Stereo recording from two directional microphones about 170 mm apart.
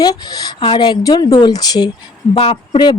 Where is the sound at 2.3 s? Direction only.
35° left (ahead or behind).